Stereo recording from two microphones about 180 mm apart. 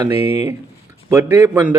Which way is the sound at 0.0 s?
15° right (ahead or behind).